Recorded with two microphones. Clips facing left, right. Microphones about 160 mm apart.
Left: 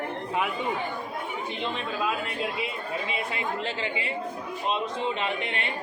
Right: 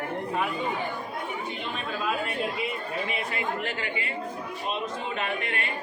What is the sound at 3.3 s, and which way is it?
Speech, 20° left (ahead or behind).